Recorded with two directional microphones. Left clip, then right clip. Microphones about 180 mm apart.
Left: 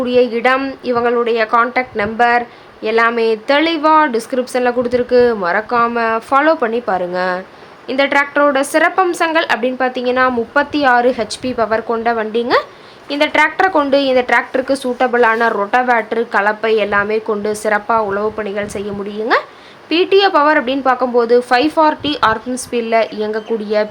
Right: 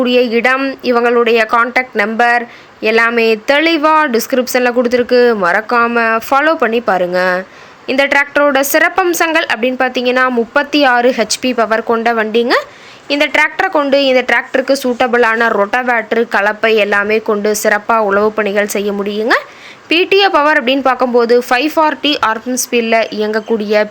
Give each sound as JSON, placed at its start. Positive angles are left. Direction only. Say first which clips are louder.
{"t": 0.0, "sound": "a woman's voice", "louder": "right 2 dB", "side_deg": -20}